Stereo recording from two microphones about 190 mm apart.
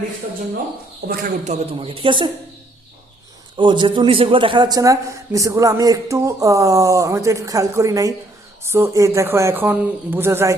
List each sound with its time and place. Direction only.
1.0 s speech: 50° right (ahead or behind)
1.5 s a man's voice: 30° right (ahead or behind)
3.6 s a man's voice: 25° right (ahead or behind)